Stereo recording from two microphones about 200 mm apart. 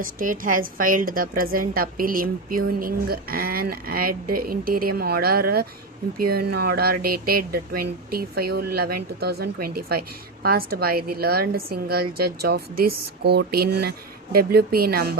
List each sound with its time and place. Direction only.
0.0 s speech: 45° right (ahead or behind)